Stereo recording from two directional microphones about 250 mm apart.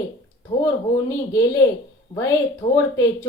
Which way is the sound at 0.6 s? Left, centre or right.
Centre.